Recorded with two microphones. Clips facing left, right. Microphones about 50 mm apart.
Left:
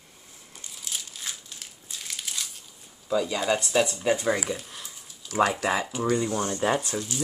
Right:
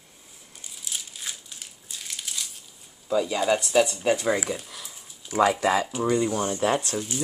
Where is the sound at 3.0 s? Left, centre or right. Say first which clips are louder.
Right 2 dB; centre.